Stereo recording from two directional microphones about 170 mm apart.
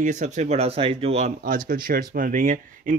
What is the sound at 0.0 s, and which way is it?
Speech, 45° right (ahead or behind).